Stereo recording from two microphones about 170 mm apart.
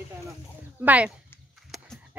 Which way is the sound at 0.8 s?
10° right (ahead or behind).